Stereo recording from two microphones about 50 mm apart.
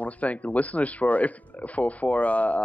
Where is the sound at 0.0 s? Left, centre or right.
Left.